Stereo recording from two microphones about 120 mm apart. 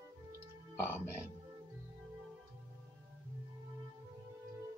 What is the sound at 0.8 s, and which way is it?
Speech, 20° left (ahead or behind).